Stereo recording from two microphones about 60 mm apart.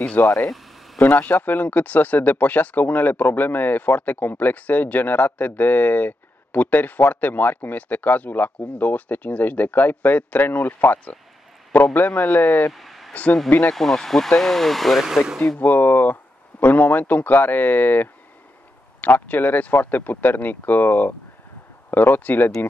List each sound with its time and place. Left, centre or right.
0.0 s speech: left
0.5 s a sound: centre
0.9 s speech: left
12.7 s a sound: centre
13.1 s speech: left
13.7 s speech: centre
15.6 s speech: left